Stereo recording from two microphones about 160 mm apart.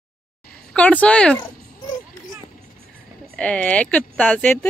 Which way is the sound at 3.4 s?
5° left (ahead or behind).